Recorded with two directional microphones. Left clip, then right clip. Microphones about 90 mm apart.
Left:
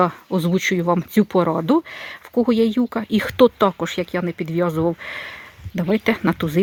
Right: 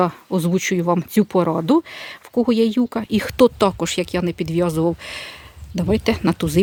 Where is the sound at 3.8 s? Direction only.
50° right (ahead or behind).